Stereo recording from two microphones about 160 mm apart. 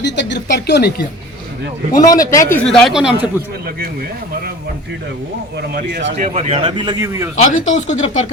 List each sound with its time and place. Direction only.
0.0 s speech: 90° left
1.9 s speech: 20° left (ahead or behind)
2.6 s speech: 5° left (ahead or behind)
6.1 s speech: 45° right (ahead or behind); by 7.3 s 20° right (ahead or behind)
7.3 s speech: 50° left (ahead or behind)